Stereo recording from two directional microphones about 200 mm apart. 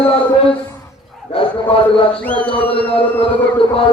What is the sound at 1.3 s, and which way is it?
Bow-wow, 25° left (ahead or behind).